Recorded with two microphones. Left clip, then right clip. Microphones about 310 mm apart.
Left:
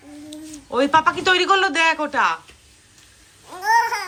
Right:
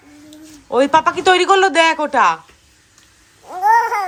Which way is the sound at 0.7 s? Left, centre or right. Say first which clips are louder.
Right 3 dB; centre.